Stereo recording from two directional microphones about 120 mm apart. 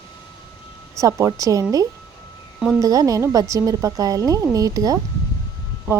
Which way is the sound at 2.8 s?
30° right (ahead or behind).